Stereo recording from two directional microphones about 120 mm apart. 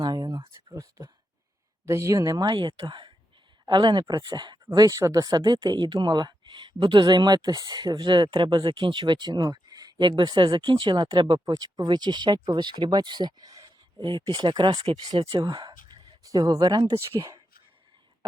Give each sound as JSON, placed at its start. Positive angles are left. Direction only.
{"t": 0.0, "sound": "a sound", "side_deg": -35}
{"t": 0.7, "sound": "whispering", "side_deg": -25}
{"t": 1.8, "sound": "speech", "side_deg": -25}